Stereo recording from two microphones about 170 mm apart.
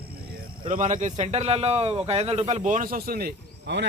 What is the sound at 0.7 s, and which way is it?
A man's voice, 50° right (ahead or behind).